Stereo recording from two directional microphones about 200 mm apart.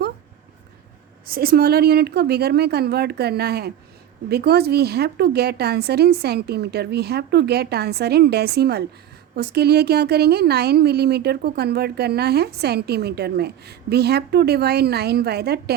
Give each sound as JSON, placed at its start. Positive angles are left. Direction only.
{"t": 1.3, "sound": "a woman's voice", "side_deg": -50}